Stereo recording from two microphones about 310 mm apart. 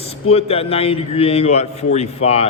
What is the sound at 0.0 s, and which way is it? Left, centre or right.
A man's voice, centre.